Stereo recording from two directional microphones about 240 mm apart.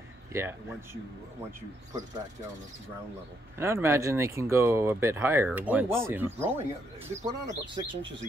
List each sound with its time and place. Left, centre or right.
0.3 s speech: centre
3.5 s speech: centre
7.2 s speech: centre